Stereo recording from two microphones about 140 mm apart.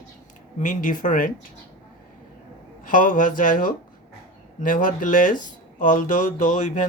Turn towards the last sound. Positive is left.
turn(degrees=60)  # may be behind; listen again after turning